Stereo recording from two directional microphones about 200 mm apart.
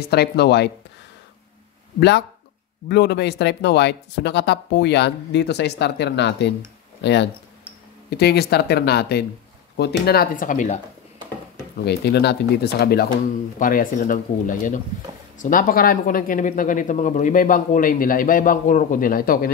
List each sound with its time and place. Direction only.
0.0 s speech: 55° left (ahead or behind)
2.0 s speech: 55° left (ahead or behind); by 10.8 s 40° left (ahead or behind)
11.8 s speech: 55° left (ahead or behind)